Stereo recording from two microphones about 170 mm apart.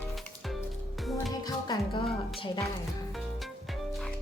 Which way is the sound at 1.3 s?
20° left (ahead or behind).